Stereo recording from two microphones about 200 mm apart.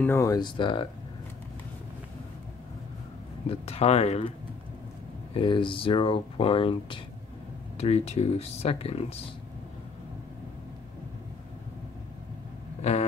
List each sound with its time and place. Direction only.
0.0 s speech: 15° left (ahead or behind)
3.4 s speech: 30° left (ahead or behind)
5.3 s speech: 25° left (ahead or behind)